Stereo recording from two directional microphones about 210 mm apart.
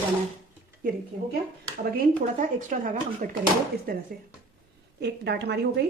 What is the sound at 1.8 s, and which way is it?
Speech, 40° right (ahead or behind).